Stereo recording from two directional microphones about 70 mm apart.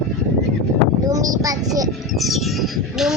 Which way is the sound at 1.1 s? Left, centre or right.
Right.